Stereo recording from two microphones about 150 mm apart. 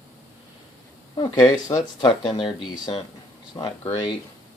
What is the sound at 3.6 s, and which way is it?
Speech, 25° left (ahead or behind).